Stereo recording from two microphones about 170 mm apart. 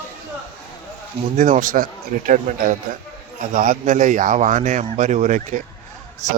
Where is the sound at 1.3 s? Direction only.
50° right (ahead or behind).